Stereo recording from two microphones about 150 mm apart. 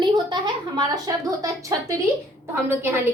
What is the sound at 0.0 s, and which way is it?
A woman's voice, 30° right (ahead or behind).